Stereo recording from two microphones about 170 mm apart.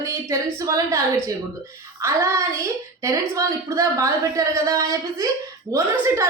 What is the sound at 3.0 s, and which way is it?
A woman's voice, 20° right (ahead or behind).